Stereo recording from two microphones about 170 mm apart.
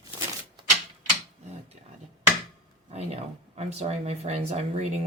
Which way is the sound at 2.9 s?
40° right (ahead or behind).